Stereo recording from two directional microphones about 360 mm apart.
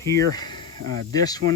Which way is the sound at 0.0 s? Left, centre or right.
Centre.